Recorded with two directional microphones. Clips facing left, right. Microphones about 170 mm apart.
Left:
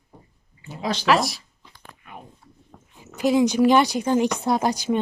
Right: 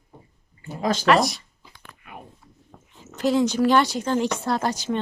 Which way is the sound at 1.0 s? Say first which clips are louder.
Right 1 dB; centre (ahead or behind).